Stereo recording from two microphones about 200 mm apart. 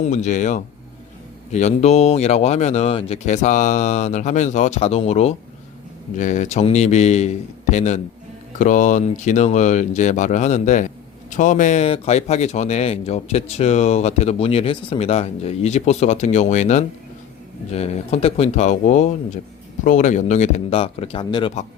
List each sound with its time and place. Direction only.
0.0 s speech: 35° left (ahead or behind)